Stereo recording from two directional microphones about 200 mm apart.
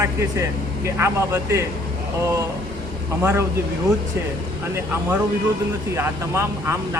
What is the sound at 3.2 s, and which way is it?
Speech, 10° right (ahead or behind).